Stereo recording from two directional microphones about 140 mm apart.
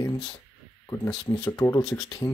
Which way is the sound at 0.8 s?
20° left (ahead or behind).